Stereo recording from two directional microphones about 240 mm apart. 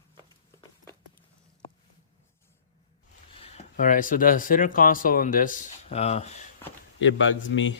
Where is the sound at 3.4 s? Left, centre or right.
Left.